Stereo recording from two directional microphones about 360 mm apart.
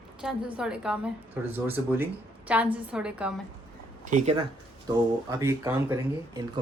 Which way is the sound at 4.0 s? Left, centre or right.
Right.